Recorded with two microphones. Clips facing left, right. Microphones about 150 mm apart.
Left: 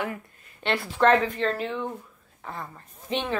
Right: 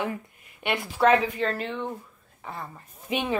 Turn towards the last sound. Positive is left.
turn(degrees=-10)  # may be behind; listen again after turning